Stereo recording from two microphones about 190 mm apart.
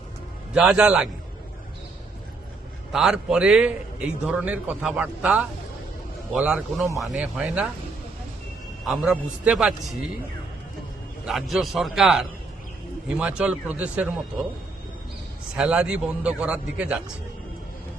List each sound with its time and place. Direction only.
0.5 s a man's voice: 5° right (ahead or behind)
2.9 s a man's voice: 5° right (ahead or behind)
8.9 s a man's voice: 5° right (ahead or behind)
11.3 s a man's voice: centre (ahead or behind)
15.5 s a man's voice: 5° right (ahead or behind)